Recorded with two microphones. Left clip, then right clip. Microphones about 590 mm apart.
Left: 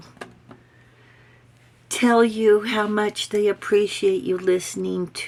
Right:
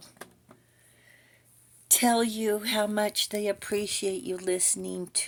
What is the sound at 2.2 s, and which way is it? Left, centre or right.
Speech, right.